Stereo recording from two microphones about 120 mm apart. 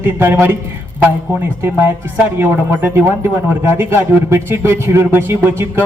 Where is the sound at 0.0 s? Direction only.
20° right (ahead or behind).